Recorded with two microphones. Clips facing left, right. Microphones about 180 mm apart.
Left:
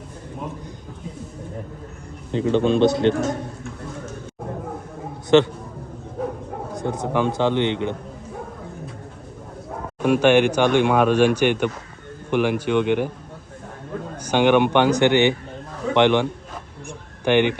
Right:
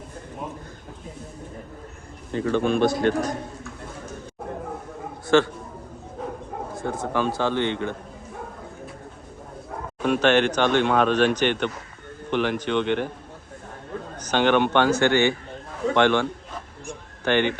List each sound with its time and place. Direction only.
2.3 s a man's voice: 20° left (ahead or behind)
5.3 s a man's voice: 20° left (ahead or behind)
6.7 s a man's voice: 20° left (ahead or behind)
10.0 s speech: 10° left (ahead or behind)
14.3 s speech: 10° left (ahead or behind)